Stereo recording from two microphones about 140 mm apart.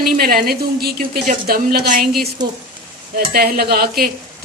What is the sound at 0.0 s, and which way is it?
A woman's voice, 90° right.